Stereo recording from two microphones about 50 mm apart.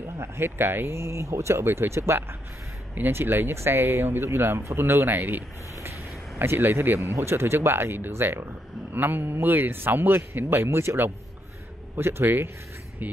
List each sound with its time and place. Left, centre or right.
0.0 s a man's voice: right
1.0 s speech: right
2.9 s a man's voice: right
5.8 s a sound: right
7.2 s a man's voice: right
8.1 s speech: right
8.9 s a man's voice: right
13.0 s speech: right